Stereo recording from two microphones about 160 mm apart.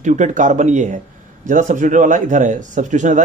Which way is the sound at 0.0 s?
50° right (ahead or behind).